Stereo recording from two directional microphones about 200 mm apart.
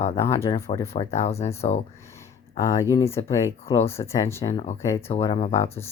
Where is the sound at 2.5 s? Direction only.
15° left (ahead or behind).